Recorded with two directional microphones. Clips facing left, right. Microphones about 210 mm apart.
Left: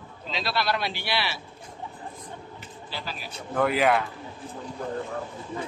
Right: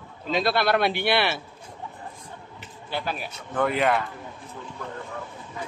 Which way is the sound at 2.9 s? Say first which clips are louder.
Right 7 dB; 55° right (ahead or behind).